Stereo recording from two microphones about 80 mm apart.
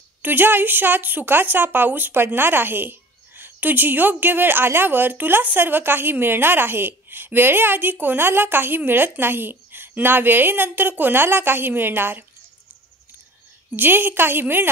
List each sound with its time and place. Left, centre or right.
0.2 s a woman's voice: right
13.7 s a woman's voice: right